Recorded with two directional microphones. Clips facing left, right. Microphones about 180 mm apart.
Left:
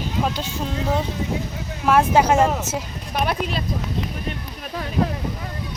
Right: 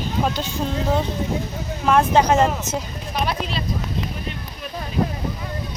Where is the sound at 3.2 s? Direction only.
50° left (ahead or behind).